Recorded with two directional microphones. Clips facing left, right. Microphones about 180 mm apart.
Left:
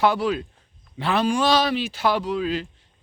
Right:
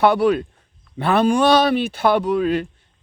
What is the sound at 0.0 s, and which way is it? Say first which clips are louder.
A man's voice: right 5 dB; 60° right (ahead or behind).